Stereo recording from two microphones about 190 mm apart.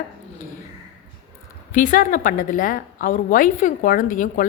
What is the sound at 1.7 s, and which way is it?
A woman's voice, 45° left (ahead or behind).